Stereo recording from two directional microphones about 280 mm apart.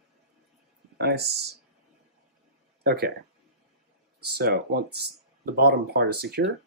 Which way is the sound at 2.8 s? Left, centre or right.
Right.